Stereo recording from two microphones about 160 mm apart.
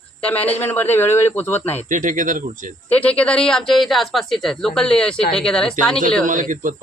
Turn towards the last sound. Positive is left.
turn(degrees=-55)  # may be behind; listen again after turning